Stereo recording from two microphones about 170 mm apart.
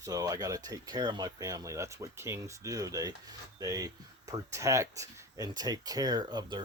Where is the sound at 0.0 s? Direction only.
20° right (ahead or behind).